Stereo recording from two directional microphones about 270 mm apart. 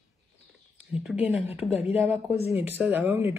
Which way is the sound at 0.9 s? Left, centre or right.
Centre.